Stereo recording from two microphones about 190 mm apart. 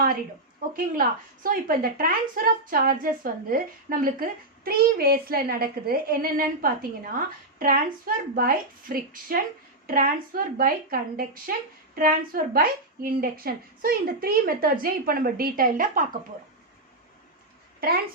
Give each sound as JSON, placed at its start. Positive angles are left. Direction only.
{"t": 0.7, "sound": "a woman's voice", "side_deg": -45}
{"t": 17.7, "sound": "speech", "side_deg": -50}